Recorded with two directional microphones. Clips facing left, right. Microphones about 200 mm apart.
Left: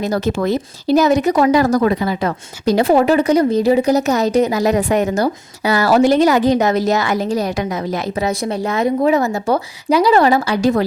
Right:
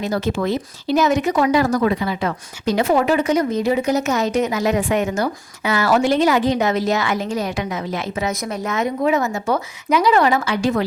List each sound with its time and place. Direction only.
0.0 s speech: 40° left (ahead or behind)